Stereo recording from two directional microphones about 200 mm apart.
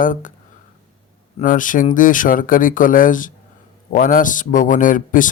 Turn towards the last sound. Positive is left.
turn(degrees=40)  # may be behind; listen again after turning